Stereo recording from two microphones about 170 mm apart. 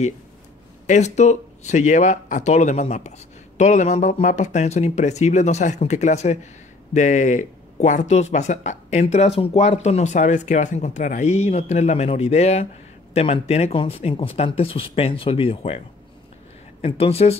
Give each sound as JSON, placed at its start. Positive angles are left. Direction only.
{"t": 0.8, "sound": "speech", "side_deg": 45}
{"t": 16.8, "sound": "speech", "side_deg": 35}